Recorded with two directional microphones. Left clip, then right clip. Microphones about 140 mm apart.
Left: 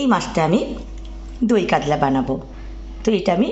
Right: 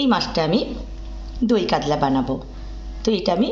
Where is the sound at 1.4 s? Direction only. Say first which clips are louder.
Left 2 dB; 30° left (ahead or behind).